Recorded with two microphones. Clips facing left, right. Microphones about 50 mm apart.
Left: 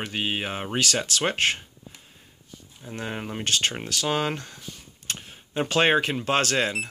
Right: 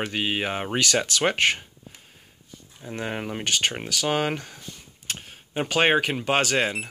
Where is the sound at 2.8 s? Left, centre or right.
Right.